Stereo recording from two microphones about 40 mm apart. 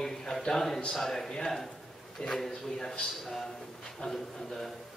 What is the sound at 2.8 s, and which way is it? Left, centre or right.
A man's voice, centre.